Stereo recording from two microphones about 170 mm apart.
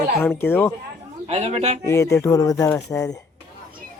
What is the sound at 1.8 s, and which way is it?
Speech, 15° left (ahead or behind).